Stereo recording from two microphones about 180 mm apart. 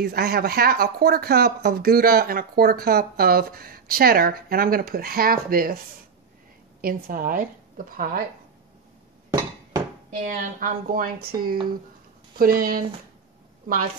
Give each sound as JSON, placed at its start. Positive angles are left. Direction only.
{"t": 0.0, "sound": "speech", "side_deg": -60}
{"t": 6.8, "sound": "speech", "side_deg": -50}
{"t": 10.1, "sound": "speech", "side_deg": -45}